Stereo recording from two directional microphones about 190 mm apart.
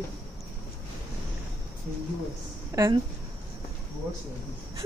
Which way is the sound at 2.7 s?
15° right (ahead or behind).